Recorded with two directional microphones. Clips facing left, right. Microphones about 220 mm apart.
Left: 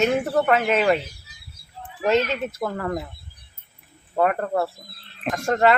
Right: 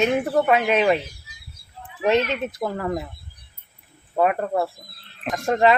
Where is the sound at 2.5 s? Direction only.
10° right (ahead or behind).